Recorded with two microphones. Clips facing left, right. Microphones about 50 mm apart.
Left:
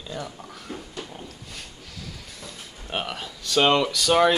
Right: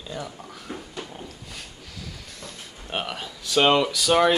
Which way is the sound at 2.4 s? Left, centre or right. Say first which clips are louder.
Right 1 dB; centre.